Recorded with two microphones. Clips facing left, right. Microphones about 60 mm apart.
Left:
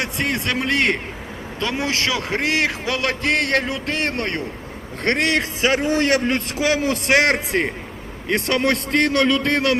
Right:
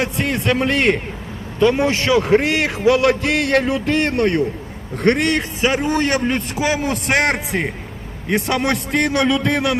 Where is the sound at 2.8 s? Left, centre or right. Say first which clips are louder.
Right 7 dB; centre.